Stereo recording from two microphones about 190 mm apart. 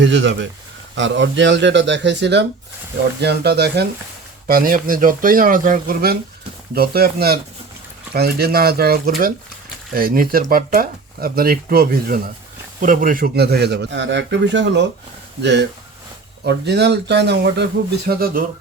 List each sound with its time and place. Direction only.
0.0 s a man's voice: 70° right (ahead or behind); by 18.4 s 55° right (ahead or behind)